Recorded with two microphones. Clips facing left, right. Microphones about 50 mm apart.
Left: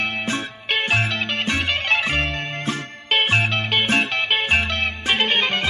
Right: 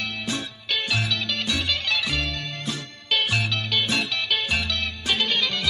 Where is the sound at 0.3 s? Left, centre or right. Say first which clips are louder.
Left 4 dB; left.